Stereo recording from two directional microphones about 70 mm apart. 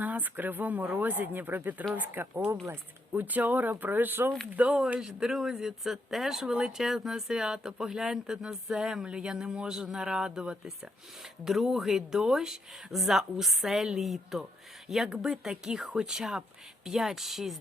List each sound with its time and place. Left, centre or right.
0.0 s speech: right
4.5 s speech: centre